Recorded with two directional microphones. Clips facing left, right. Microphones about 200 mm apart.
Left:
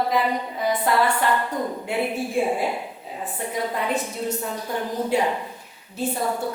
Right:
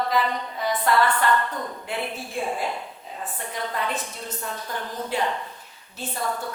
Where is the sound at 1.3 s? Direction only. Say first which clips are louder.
Left 1 dB; 20° left (ahead or behind).